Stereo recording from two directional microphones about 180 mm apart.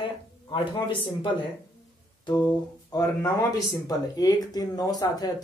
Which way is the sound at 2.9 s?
20° left (ahead or behind).